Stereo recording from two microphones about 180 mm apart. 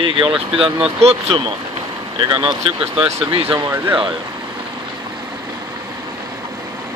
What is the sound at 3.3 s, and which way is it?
Speech, 30° right (ahead or behind).